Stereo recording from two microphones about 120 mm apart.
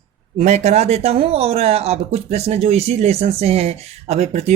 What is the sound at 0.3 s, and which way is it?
Speech, 65° right (ahead or behind).